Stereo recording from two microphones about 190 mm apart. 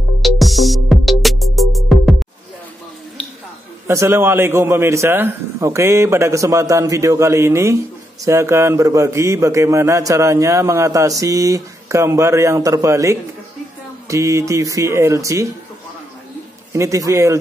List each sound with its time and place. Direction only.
0.2 s music: centre (ahead or behind)
3.8 s a man's voice: 15° right (ahead or behind)
16.7 s a man's voice: 15° right (ahead or behind)